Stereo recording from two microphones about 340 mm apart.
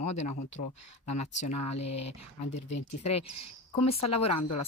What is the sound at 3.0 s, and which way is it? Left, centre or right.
Speech, centre.